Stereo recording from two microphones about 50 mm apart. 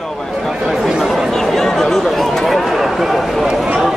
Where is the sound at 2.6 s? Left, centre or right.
Centre.